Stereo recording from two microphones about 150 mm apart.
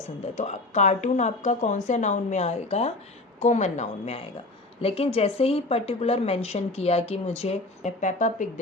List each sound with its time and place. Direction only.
0.3 s speech: 50° left (ahead or behind)